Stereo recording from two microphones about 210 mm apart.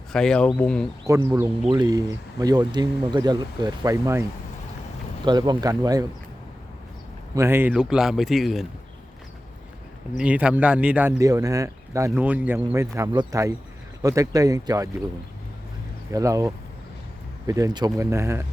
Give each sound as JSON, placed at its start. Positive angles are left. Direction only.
{"t": 0.1, "sound": "a man's voice", "side_deg": 5}
{"t": 1.1, "sound": "speech", "side_deg": -15}
{"t": 7.3, "sound": "a man's voice", "side_deg": -10}
{"t": 10.2, "sound": "speech", "side_deg": -5}
{"t": 16.1, "sound": "speech", "side_deg": -15}